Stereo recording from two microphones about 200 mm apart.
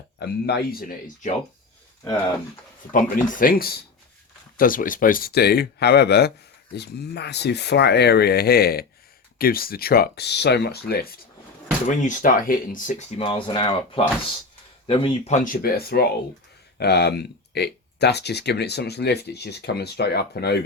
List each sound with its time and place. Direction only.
0.2 s speech: 55° left (ahead or behind)
2.9 s speech: 45° left (ahead or behind)
12.0 s speech: 40° left (ahead or behind)
13.1 s speech: 25° left (ahead or behind)
15.3 s speech: 40° left (ahead or behind)